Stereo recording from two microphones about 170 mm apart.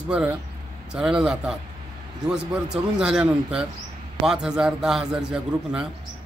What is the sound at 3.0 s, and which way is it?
A man's voice, 5° right (ahead or behind).